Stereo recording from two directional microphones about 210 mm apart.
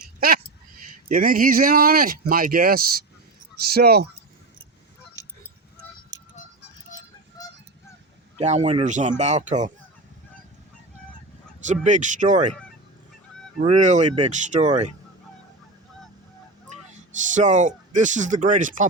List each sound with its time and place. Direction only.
0.0 s a sound: 45° right (ahead or behind)
1.0 s speech: 45° right (ahead or behind)
8.4 s speech: 30° right (ahead or behind)
11.6 s speech: 35° right (ahead or behind)
13.7 s speech: 35° right (ahead or behind)
17.2 s speech: 35° right (ahead or behind)